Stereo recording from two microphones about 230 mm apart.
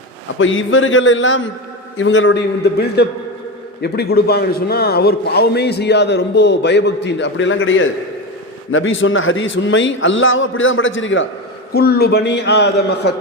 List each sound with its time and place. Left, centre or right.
0.3 s a man's voice: left
11.7 s a man's voice: left